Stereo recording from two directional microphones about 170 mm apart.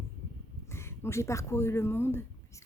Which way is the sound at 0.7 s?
15° left (ahead or behind).